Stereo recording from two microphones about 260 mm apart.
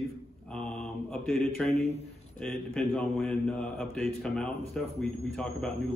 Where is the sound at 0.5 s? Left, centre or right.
Centre.